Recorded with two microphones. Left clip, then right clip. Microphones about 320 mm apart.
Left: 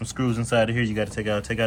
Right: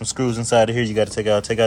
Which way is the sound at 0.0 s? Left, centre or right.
Centre.